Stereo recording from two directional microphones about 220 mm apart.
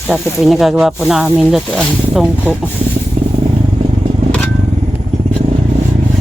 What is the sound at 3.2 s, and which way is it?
Vehicle, 30° right (ahead or behind).